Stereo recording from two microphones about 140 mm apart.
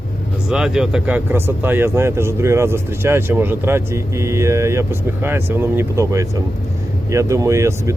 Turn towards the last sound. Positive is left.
turn(degrees=-20)  # may be behind; listen again after turning